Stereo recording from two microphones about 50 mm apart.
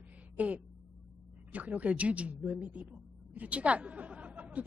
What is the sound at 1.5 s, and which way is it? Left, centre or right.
A woman's voice, right.